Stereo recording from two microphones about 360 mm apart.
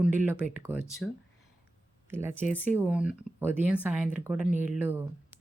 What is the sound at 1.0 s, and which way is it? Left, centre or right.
Speech, left.